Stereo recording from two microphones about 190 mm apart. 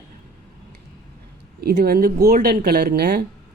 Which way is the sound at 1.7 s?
55° right (ahead or behind).